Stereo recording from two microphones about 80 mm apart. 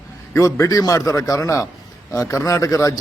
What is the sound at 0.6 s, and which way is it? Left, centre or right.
Speech, left.